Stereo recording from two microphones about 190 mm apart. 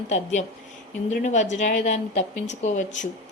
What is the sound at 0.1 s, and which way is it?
Speech, 40° left (ahead or behind).